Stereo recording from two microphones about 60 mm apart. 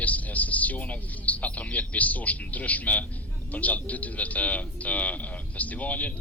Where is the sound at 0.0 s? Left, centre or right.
Left.